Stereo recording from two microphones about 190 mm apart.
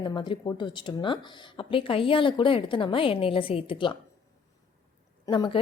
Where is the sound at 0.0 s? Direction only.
25° left (ahead or behind).